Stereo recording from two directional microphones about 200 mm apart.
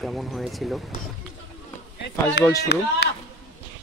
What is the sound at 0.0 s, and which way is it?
Speech, centre (ahead or behind).